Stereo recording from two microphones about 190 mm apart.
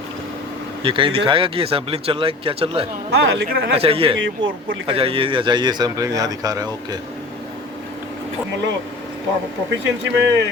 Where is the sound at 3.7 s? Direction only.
30° right (ahead or behind).